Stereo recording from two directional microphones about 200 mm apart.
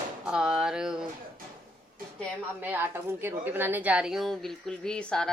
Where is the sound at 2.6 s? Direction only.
10° right (ahead or behind).